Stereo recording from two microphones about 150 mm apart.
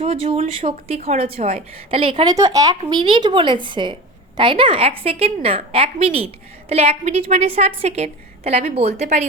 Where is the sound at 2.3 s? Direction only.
25° right (ahead or behind).